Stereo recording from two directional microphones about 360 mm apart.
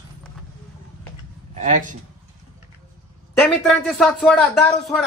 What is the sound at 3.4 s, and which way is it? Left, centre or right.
A man's voice, centre.